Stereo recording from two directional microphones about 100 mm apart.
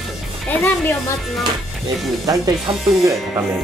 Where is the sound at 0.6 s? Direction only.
25° left (ahead or behind).